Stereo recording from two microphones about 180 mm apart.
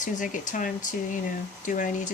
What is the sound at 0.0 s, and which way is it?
Speech, 45° left (ahead or behind).